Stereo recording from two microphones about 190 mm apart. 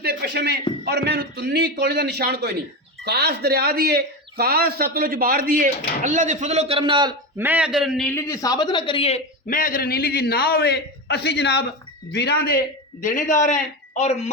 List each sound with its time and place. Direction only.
0.0 s a man's voice: 60° right (ahead or behind); by 7.1 s 25° right (ahead or behind)
7.3 s a man's voice: 10° right (ahead or behind)
8.3 s a man's voice: 20° left (ahead or behind); by 12.5 s 60° left (ahead or behind)
13.0 s a man's voice: 45° left (ahead or behind)